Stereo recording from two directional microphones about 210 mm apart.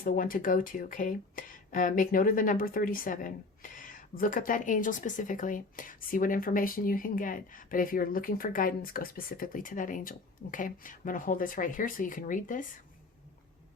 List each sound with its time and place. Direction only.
0.0 s speech: 40° left (ahead or behind)